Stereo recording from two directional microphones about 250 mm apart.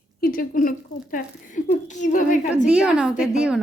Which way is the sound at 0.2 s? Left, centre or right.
Left.